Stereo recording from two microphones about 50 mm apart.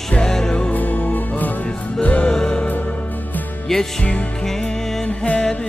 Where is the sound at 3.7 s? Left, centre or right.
Centre.